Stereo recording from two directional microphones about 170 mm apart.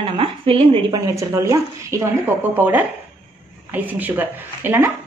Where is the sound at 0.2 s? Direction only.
35° right (ahead or behind).